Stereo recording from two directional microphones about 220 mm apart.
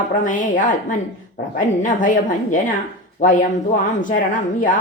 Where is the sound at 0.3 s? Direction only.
35° left (ahead or behind).